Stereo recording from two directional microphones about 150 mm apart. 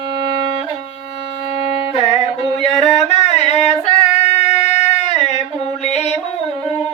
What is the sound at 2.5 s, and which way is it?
Singing, 45° left (ahead or behind).